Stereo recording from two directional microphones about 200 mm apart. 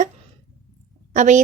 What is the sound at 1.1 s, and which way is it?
Speech, 35° right (ahead or behind).